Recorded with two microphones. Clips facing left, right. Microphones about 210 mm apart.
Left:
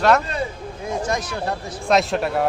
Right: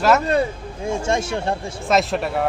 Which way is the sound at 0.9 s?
25° right (ahead or behind).